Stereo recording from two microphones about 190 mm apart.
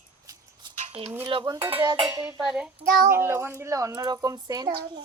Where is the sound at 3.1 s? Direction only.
10° right (ahead or behind).